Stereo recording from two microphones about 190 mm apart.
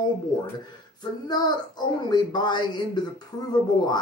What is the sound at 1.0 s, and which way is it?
Speech, 20° left (ahead or behind).